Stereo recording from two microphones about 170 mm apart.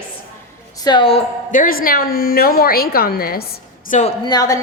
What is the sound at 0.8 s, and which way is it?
Speech, 30° left (ahead or behind).